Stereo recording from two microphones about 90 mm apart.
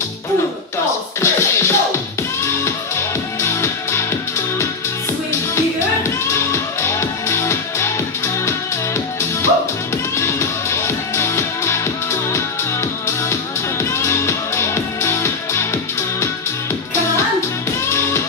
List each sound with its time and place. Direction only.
1.2 s music: 30° left (ahead or behind)
6.0 s music: 30° left (ahead or behind)
17.8 s music: 30° left (ahead or behind)